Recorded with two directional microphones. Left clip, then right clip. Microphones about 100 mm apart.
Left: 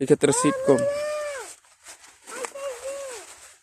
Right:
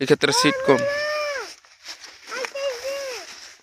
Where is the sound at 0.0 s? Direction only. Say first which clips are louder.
Right 2 dB; 30° left (ahead or behind).